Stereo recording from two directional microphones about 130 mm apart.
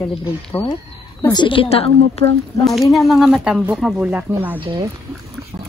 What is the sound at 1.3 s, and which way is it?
Speech, 40° left (ahead or behind).